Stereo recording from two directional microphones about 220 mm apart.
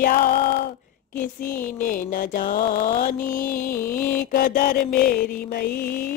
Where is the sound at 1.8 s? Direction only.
40° left (ahead or behind).